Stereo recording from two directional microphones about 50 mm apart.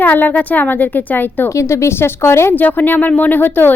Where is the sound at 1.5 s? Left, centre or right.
Left.